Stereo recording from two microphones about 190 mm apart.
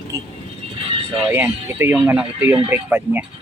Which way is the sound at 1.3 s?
10° right (ahead or behind).